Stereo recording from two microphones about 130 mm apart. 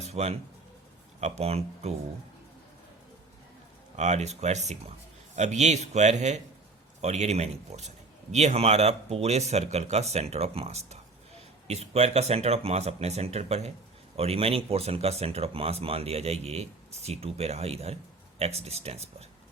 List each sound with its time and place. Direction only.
0.0 s a sound: 55° right (ahead or behind)
1.2 s a man's voice: 55° right (ahead or behind)
3.9 s a man's voice: 60° right (ahead or behind)